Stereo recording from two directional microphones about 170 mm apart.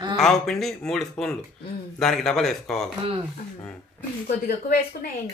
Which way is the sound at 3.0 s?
30° right (ahead or behind).